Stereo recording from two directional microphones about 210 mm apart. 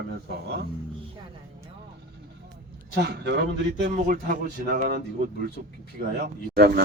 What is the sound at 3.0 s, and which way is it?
Speech, 55° right (ahead or behind).